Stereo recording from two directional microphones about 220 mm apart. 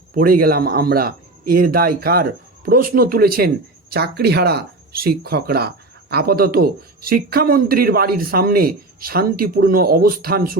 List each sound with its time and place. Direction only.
0.1 s speech: 40° right (ahead or behind)